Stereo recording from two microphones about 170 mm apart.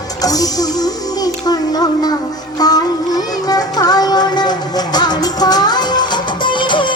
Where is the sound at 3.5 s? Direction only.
20° left (ahead or behind).